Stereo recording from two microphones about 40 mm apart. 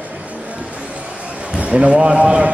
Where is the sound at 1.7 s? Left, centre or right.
Right.